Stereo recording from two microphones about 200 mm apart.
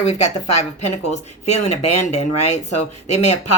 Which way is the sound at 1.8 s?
35° left (ahead or behind).